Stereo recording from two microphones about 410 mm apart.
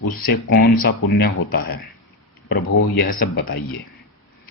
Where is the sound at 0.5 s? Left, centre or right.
Left.